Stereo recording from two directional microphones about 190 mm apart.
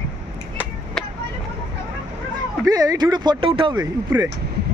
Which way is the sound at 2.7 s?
20° right (ahead or behind).